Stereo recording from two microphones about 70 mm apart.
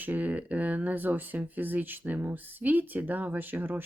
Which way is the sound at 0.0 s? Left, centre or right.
Right.